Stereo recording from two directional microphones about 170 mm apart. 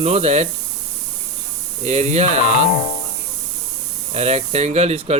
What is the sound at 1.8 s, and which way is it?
Speech, 40° right (ahead or behind).